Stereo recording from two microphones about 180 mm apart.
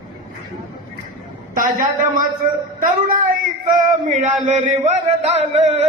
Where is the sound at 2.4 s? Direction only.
50° right (ahead or behind).